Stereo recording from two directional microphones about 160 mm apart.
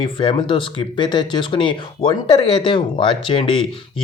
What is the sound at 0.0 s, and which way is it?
Speech, 30° left (ahead or behind).